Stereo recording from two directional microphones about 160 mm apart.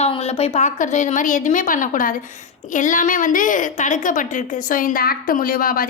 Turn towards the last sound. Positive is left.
turn(degrees=65)  # may be behind; listen again after turning